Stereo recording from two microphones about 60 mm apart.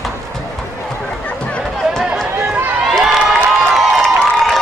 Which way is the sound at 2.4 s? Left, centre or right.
Right.